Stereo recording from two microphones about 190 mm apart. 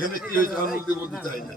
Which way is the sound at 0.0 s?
50° left (ahead or behind).